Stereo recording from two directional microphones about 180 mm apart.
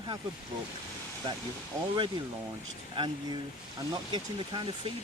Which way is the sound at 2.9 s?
25° right (ahead or behind).